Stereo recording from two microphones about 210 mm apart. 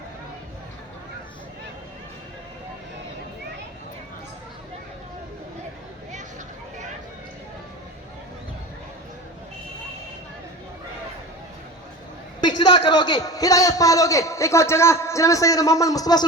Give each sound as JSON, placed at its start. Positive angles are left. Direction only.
{"t": 12.4, "sound": "a man's voice", "side_deg": 20}